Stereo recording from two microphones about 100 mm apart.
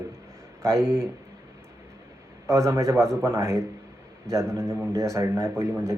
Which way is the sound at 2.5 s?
30° right (ahead or behind).